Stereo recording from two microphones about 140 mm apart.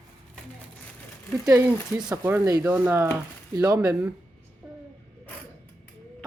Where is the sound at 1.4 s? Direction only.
25° right (ahead or behind).